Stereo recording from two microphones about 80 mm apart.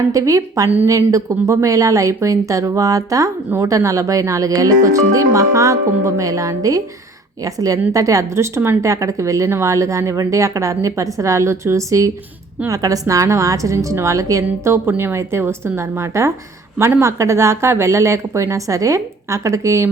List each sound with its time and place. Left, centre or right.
0.1 s a woman's voice: right